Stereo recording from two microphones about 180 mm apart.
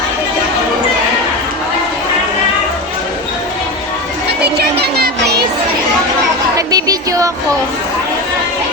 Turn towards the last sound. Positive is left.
turn(degrees=-20)  # may be behind; listen again after turning